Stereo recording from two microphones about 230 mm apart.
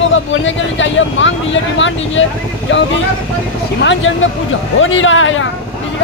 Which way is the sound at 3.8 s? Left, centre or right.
Left.